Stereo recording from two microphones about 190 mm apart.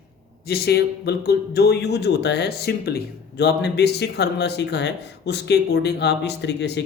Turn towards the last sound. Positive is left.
turn(degrees=65)  # may be behind; listen again after turning